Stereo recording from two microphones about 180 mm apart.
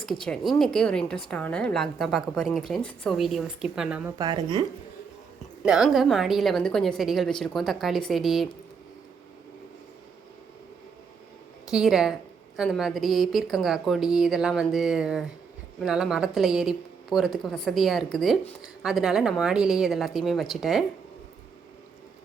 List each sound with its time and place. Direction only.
0.3 s a woman's voice: 5° left (ahead or behind)
4.2 s speech: 20° right (ahead or behind)
5.6 s a woman's voice: 5° right (ahead or behind)
11.7 s a woman's voice: centre (ahead or behind)